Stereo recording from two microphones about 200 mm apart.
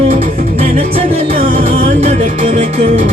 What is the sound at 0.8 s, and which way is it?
Music, 30° right (ahead or behind).